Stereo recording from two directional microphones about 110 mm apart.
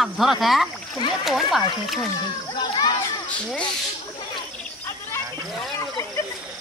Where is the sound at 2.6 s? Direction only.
40° left (ahead or behind).